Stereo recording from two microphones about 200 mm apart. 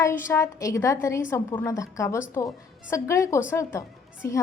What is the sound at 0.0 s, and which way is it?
A woman's voice, 15° left (ahead or behind).